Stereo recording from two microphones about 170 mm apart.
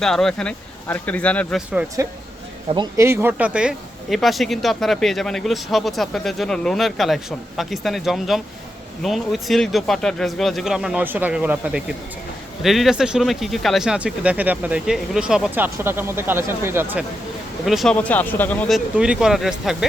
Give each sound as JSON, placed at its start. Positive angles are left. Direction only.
{"t": 0.0, "sound": "speech", "side_deg": 5}
{"t": 2.0, "sound": "speech", "side_deg": -20}
{"t": 17.7, "sound": "speech", "side_deg": 0}
{"t": 17.9, "sound": "speech", "side_deg": 10}
{"t": 18.9, "sound": "speech", "side_deg": -5}